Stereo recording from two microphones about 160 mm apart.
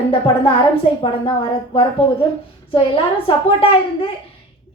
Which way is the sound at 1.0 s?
35° left (ahead or behind).